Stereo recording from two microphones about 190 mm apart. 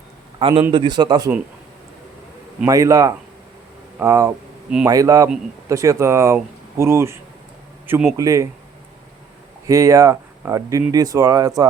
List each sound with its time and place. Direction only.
0.3 s a man's voice: 25° right (ahead or behind)
2.6 s speech: 15° right (ahead or behind)
9.6 s speech: 15° right (ahead or behind)